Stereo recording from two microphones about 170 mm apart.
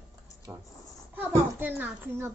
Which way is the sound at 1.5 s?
10° right (ahead or behind).